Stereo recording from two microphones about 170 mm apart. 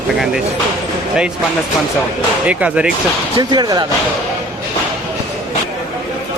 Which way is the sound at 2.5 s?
10° right (ahead or behind).